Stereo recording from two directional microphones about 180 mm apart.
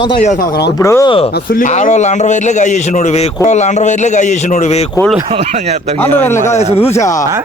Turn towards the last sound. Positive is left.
turn(degrees=15)  # may be behind; listen again after turning